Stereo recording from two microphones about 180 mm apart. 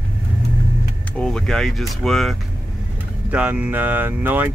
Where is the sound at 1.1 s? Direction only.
5° left (ahead or behind).